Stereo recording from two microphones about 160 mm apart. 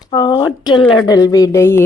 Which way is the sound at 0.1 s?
20° left (ahead or behind).